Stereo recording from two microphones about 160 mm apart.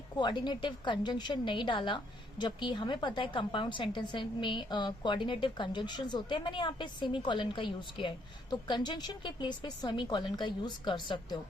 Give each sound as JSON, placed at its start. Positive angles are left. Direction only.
{"t": 0.2, "sound": "a woman's voice", "side_deg": 30}